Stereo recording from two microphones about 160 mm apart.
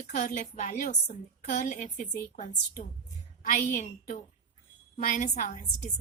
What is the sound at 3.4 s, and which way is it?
Speech, 50° left (ahead or behind).